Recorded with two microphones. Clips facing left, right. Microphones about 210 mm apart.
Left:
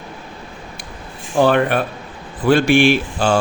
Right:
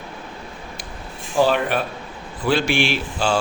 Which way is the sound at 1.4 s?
55° left (ahead or behind).